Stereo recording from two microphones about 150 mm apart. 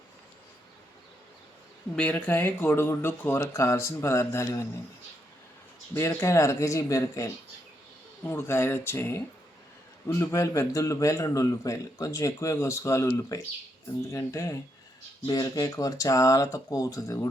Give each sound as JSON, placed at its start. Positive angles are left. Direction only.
{"t": 2.0, "sound": "speech", "side_deg": 10}
{"t": 5.9, "sound": "a man's voice", "side_deg": 15}
{"t": 8.3, "sound": "a man's voice", "side_deg": 15}